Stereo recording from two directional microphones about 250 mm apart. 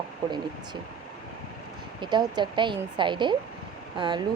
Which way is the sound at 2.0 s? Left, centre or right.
Centre.